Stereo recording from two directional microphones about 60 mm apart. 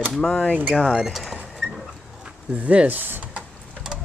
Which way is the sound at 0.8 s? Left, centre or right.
Centre.